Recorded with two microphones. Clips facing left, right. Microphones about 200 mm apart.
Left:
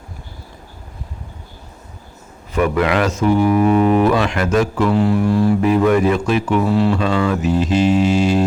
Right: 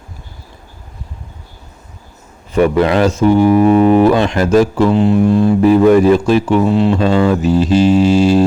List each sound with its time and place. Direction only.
2.5 s speech: 30° right (ahead or behind)